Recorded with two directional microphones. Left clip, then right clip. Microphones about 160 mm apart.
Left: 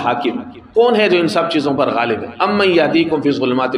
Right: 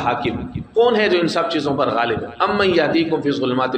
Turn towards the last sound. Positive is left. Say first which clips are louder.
# left 3 dB
turn(degrees=25)  # may be behind; listen again after turning